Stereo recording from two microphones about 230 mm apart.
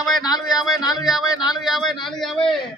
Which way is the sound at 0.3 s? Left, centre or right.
Centre.